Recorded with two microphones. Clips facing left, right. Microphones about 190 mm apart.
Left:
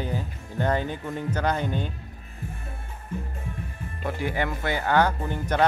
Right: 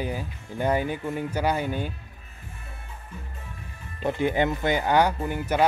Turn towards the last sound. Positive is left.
turn(degrees=-10)  # may be behind; listen again after turning